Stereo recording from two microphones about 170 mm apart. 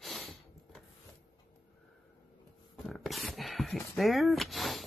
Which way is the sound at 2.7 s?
Centre (ahead or behind).